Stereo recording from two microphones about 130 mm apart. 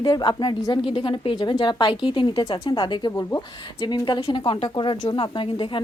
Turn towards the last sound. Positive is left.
turn(degrees=40)  # may be behind; listen again after turning